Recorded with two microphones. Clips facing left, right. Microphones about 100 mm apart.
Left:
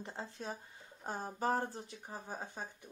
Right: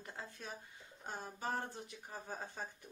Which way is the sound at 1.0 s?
40° left (ahead or behind).